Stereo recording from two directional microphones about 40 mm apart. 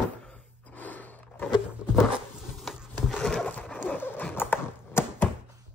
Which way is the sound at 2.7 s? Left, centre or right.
Centre.